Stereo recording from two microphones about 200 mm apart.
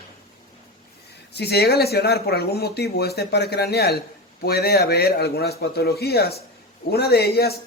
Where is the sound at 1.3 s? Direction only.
55° left (ahead or behind).